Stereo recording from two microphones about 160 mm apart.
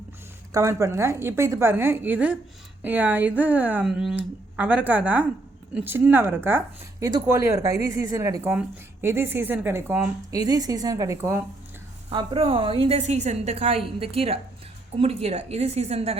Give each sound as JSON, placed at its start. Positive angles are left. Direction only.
{"t": 0.5, "sound": "a woman's voice", "side_deg": -20}
{"t": 10.3, "sound": "a woman's voice", "side_deg": -25}
{"t": 12.1, "sound": "a woman's voice", "side_deg": -35}